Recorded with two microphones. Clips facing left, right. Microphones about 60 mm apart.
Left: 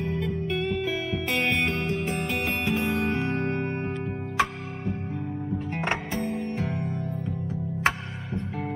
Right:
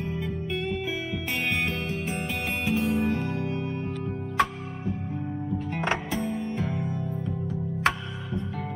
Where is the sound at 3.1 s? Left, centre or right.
Left.